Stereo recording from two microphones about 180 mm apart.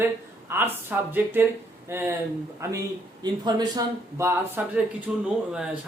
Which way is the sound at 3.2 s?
20° right (ahead or behind).